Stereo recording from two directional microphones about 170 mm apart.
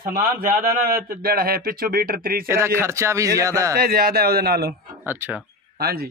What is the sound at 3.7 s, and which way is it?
Speech, 65° right (ahead or behind).